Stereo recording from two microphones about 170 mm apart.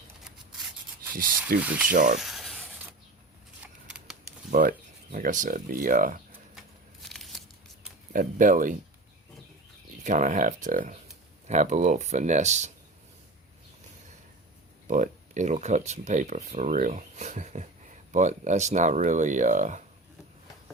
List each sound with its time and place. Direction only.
1.6 s speech: 10° right (ahead or behind)
1.9 s speech: 50° right (ahead or behind)
2.1 s rub: centre (ahead or behind)
3.8 s a sound: 5° right (ahead or behind)
4.5 s speech: 65° right (ahead or behind)
5.1 s speech: 50° right (ahead or behind)
7.1 s a sound: centre (ahead or behind)
8.1 s speech: 50° right (ahead or behind)
10.0 s speech: 45° right (ahead or behind)
14.8 s speech: 50° right (ahead or behind)